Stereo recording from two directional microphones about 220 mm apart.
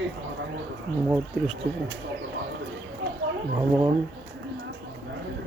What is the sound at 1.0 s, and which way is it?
Speech, 10° right (ahead or behind).